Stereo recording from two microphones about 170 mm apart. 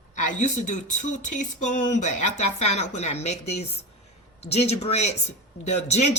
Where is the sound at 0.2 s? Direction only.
45° left (ahead or behind).